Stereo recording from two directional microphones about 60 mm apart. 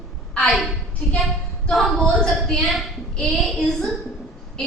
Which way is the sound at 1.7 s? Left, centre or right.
Centre.